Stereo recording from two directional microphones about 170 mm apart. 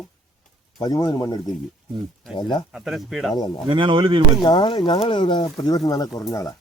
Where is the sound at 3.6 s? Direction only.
30° right (ahead or behind).